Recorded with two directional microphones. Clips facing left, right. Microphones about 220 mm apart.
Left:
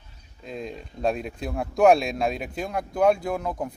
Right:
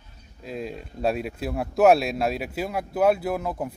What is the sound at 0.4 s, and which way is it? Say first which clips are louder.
Speech: right 2 dB; 5° right (ahead or behind).